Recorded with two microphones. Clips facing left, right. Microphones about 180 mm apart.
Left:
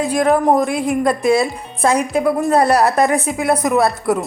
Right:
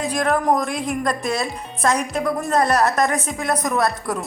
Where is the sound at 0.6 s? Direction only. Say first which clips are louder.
Left 6 dB; 5° left (ahead or behind).